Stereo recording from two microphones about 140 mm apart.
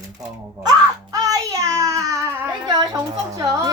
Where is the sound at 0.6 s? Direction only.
25° right (ahead or behind).